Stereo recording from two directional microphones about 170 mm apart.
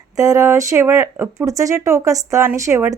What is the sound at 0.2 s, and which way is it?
Speech, 20° right (ahead or behind).